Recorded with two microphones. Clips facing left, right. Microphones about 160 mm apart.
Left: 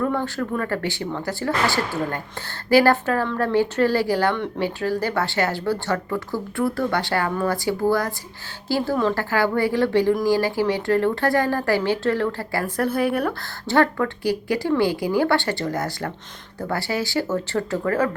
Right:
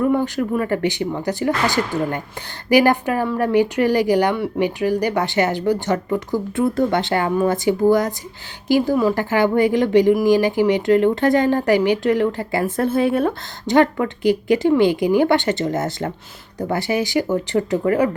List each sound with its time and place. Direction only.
0.0 s speech: 15° right (ahead or behind)